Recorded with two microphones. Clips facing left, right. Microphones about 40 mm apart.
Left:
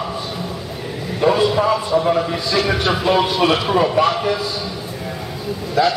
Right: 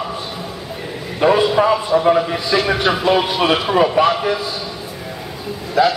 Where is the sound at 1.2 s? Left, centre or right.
Centre.